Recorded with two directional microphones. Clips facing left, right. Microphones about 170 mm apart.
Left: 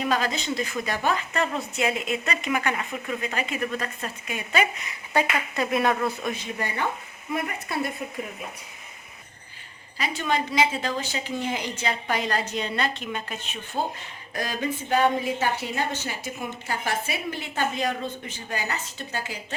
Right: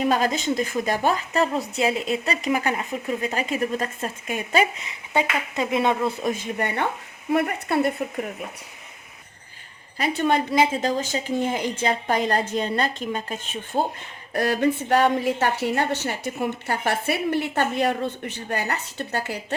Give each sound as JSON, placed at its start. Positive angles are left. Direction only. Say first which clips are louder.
{"t": 0.0, "sound": "a woman's voice", "louder": "right 4 dB", "side_deg": -45}
{"t": 5.5, "sound": "a woman's voice", "louder": "right 2 dB", "side_deg": -20}
{"t": 6.3, "sound": "a woman's voice", "louder": "right 4 dB", "side_deg": -55}
{"t": 10.0, "sound": "a woman's voice", "louder": "right 5 dB", "side_deg": -55}
{"t": 14.3, "sound": "a woman's voice", "louder": "right 8 dB", "side_deg": -65}